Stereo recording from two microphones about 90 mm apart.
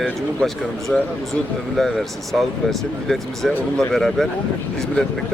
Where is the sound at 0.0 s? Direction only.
5° left (ahead or behind).